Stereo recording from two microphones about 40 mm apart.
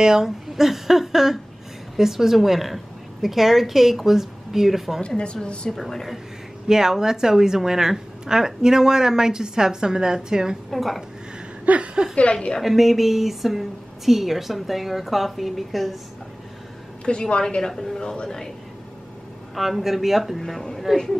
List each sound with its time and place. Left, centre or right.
0.0 s a woman's voice: centre
5.0 s a woman's voice: left
5.7 s a woman's voice: centre
6.7 s a woman's voice: centre
10.7 s a woman's voice: centre
11.6 s speech: right
12.6 s a woman's voice: centre
17.0 s a woman's voice: left
19.5 s a woman's voice: centre